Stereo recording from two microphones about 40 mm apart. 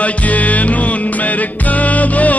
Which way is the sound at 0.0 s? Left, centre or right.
Left.